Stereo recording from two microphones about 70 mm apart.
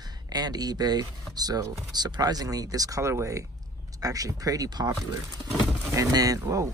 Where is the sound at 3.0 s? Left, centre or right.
Right.